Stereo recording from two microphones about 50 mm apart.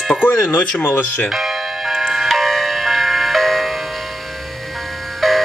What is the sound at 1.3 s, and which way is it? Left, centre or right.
Music, centre.